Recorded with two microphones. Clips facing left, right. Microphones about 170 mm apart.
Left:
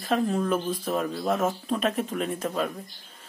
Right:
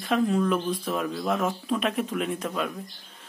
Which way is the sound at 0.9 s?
35° left (ahead or behind).